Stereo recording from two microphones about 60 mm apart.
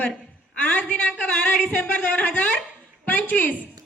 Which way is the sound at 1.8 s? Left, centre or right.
Left.